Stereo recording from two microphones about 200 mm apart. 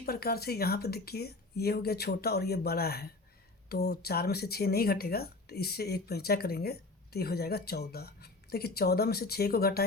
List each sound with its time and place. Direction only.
0.0 s speech: 50° left (ahead or behind)